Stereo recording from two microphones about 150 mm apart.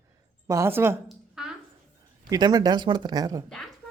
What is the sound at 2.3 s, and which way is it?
Speech, 25° right (ahead or behind).